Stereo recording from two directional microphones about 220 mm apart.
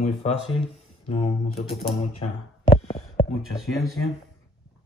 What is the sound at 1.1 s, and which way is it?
Speech, 30° left (ahead or behind).